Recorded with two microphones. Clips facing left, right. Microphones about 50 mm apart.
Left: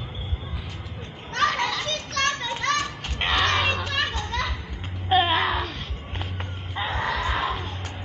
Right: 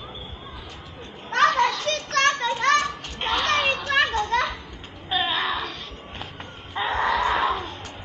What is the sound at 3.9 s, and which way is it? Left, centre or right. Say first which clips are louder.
Children playing: right 6 dB; right.